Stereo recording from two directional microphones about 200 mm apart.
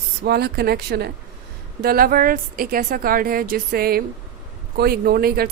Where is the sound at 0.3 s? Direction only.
55° right (ahead or behind).